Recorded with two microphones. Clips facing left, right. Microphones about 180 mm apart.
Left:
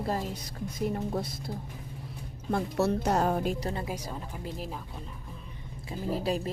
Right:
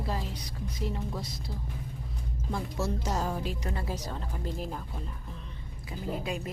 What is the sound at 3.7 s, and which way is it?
Speech, 15° left (ahead or behind).